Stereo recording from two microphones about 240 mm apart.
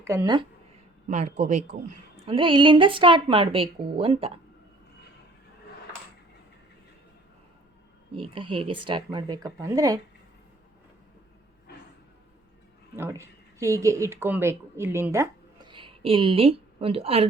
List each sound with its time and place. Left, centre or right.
0.0 s speech: centre
1.0 s a woman's voice: right
8.3 s a woman's voice: right
13.0 s speech: centre